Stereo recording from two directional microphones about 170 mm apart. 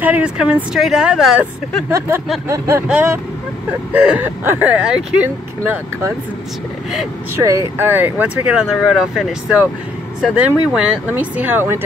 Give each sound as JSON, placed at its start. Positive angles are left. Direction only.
{"t": 0.0, "sound": "speech", "side_deg": -5}
{"t": 1.9, "sound": "speech", "side_deg": -15}
{"t": 7.4, "sound": "speech", "side_deg": -15}